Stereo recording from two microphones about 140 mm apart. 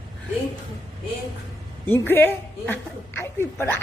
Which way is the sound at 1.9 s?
15° left (ahead or behind).